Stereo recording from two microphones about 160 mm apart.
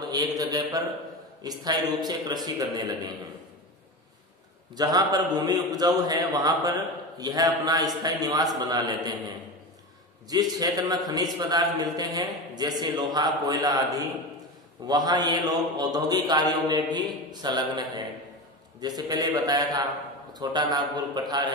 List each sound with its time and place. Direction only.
0.1 s a man's voice: 25° right (ahead or behind)
4.7 s a man's voice: 25° right (ahead or behind)
10.3 s a man's voice: 25° right (ahead or behind)